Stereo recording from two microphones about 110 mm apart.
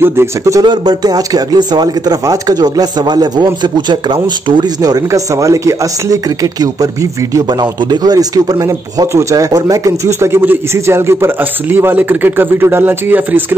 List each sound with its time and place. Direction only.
0.0 s speech: 20° right (ahead or behind)
0.6 s speech: 40° right (ahead or behind); by 13.6 s 15° right (ahead or behind)